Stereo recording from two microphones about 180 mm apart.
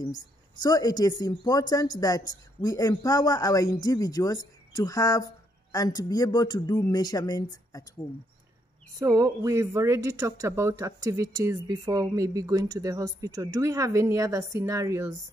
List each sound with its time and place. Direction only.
0.0 s speech: 20° left (ahead or behind)
9.0 s speech: 15° right (ahead or behind)